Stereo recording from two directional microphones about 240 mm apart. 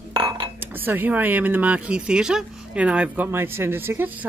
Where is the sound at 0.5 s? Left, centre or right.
Centre.